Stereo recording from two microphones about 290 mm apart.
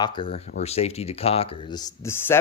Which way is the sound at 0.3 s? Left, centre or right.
Left.